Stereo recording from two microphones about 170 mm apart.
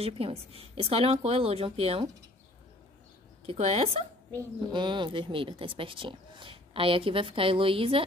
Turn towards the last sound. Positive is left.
turn(degrees=-30)  # may be behind; listen again after turning